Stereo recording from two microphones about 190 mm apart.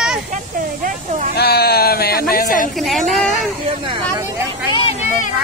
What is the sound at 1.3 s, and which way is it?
Sheep, 55° left (ahead or behind).